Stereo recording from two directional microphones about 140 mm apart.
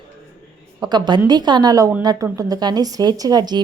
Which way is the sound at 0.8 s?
30° right (ahead or behind).